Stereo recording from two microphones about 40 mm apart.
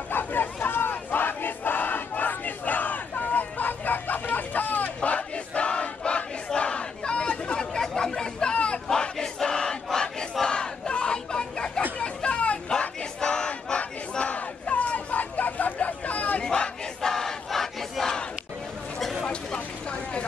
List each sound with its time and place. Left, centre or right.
0.1 s crowd: left
5.0 s crowd: left; by 9.8 s centre
10.4 s battle cry: left
12.0 s hubbub: left
13.2 s battle cry: left
16.4 s battle cry: centre
17.1 s crowd: centre
19.2 s vehicle: left